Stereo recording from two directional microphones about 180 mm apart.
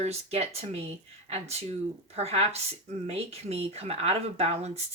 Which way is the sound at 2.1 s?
35° right (ahead or behind).